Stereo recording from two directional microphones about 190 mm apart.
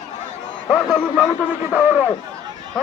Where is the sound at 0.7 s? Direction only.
5° left (ahead or behind).